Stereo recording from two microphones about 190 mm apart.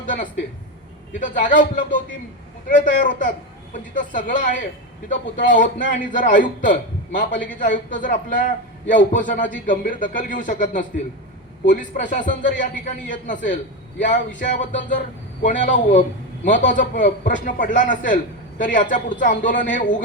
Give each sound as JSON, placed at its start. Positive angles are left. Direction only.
{"t": 0.0, "sound": "a woman's voice", "side_deg": 45}